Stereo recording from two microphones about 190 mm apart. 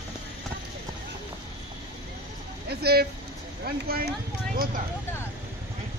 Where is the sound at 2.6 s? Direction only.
55° right (ahead or behind).